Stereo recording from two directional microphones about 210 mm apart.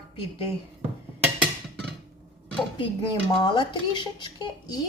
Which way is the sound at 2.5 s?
25° left (ahead or behind).